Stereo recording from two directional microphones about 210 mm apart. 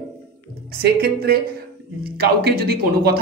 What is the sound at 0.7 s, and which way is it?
Speech, 45° right (ahead or behind).